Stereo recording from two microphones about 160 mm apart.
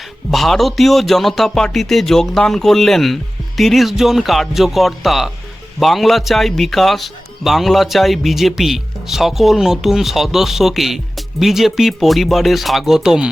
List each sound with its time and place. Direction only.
0.3 s speech: centre (ahead or behind)